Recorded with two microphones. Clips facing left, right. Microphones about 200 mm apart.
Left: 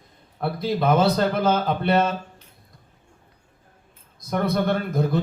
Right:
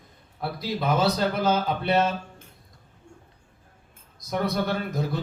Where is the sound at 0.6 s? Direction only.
55° left (ahead or behind).